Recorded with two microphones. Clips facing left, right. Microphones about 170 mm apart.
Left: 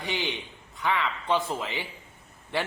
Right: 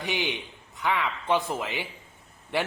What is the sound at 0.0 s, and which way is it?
A man's voice, 15° right (ahead or behind).